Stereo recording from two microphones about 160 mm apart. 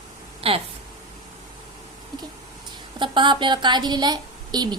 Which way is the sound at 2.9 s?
30° right (ahead or behind).